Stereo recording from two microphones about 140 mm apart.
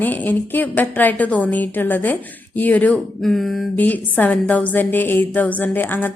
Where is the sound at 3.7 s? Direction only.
10° left (ahead or behind).